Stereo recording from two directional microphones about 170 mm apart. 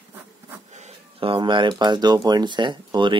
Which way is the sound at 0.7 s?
35° right (ahead or behind).